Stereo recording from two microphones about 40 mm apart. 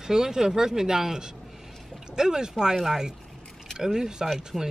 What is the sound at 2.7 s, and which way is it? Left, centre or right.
Speech, centre.